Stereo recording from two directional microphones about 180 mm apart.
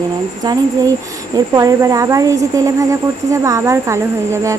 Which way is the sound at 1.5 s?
20° right (ahead or behind).